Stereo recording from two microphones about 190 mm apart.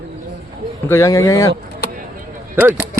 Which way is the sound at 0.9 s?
15° left (ahead or behind).